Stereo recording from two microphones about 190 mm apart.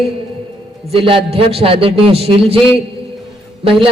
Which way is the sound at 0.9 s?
30° right (ahead or behind).